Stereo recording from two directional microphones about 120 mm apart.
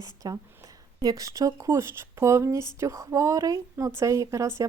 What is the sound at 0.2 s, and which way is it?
Speech, 35° right (ahead or behind).